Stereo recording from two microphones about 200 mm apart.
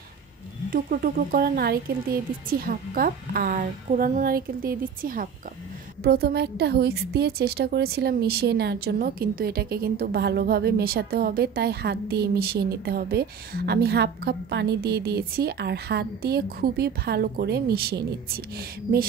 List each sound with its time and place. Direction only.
0.7 s a woman's voice: 45° right (ahead or behind)